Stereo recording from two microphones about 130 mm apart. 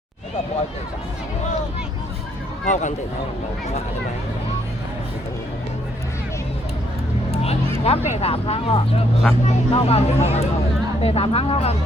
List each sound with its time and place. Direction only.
2.6 s speech: 70° left (ahead or behind)
7.9 s speech: 55° left (ahead or behind)